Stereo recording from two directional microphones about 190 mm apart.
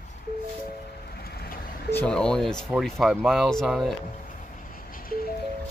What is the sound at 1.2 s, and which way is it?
Vehicle, 55° left (ahead or behind).